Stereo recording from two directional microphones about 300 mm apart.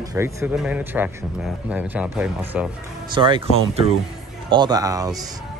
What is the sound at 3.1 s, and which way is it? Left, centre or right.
Speech, centre.